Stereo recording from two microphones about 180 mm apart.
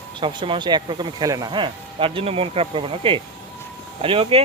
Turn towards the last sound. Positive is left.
turn(degrees=-30)  # may be behind; listen again after turning